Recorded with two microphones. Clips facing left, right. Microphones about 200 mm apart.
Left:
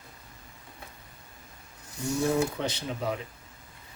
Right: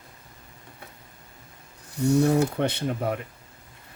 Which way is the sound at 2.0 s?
60° right (ahead or behind).